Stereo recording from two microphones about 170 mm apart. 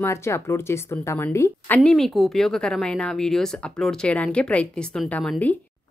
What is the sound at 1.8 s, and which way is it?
A woman's voice, centre (ahead or behind).